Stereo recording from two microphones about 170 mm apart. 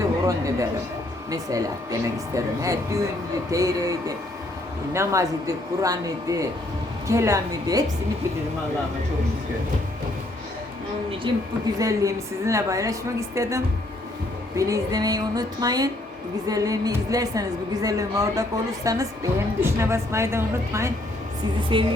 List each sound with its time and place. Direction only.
0.0 s a sound: 20° right (ahead or behind)
1.3 s a woman's voice: 20° right (ahead or behind)
11.3 s a woman's voice: 30° right (ahead or behind)
21.7 s a woman's voice: 30° right (ahead or behind)